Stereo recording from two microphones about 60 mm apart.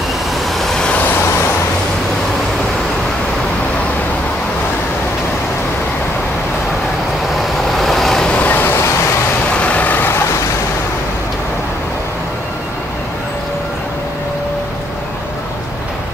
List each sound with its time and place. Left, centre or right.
0.6 s vehicle: centre
7.3 s vehicle: centre
8.3 s vehicle: left
8.6 s vehicle: left
9.5 s vehicle: left